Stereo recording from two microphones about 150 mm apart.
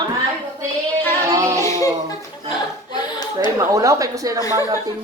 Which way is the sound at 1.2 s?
20° right (ahead or behind).